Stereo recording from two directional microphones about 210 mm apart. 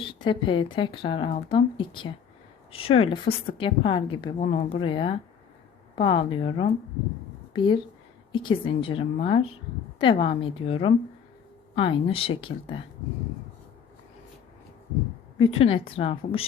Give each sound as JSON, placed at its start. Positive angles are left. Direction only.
{"t": 0.0, "sound": "speech", "side_deg": 25}
{"t": 15.5, "sound": "speech", "side_deg": 25}